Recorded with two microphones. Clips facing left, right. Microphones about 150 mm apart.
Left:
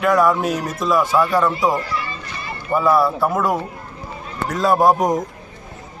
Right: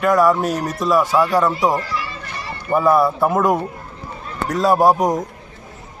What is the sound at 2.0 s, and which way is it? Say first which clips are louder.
Children playing: even; 60° right (ahead or behind).